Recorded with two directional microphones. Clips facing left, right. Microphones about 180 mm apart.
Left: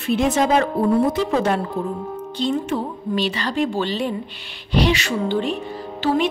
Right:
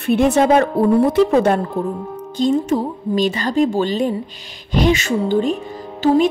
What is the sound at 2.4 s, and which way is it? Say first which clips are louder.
A woman's voice: right 6 dB; 45° right (ahead or behind).